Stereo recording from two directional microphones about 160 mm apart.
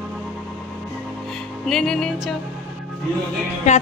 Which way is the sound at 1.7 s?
5° left (ahead or behind).